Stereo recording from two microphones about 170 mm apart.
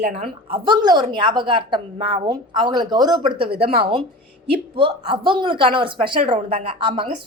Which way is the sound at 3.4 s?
65° right (ahead or behind).